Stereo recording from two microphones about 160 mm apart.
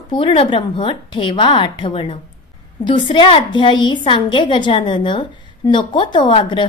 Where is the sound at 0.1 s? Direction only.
30° left (ahead or behind).